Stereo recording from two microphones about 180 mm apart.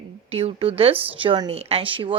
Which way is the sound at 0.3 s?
35° right (ahead or behind).